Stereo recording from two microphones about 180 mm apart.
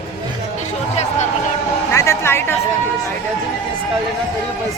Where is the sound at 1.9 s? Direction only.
15° left (ahead or behind).